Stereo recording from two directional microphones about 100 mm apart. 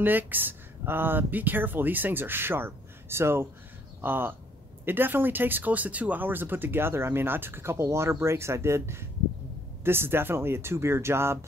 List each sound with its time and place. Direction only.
0.0 s speech: 20° right (ahead or behind)